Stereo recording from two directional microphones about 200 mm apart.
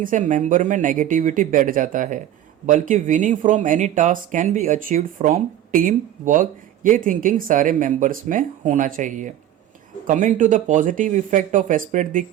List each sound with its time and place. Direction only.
0.0 s speech: 40° right (ahead or behind)